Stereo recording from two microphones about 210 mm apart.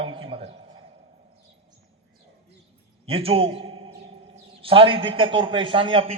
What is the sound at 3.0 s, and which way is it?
A man's voice, 25° right (ahead or behind).